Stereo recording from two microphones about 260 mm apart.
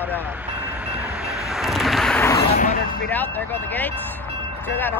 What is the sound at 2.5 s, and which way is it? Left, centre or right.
Speech, left.